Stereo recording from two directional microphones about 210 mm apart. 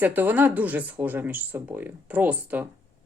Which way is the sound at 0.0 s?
10° right (ahead or behind).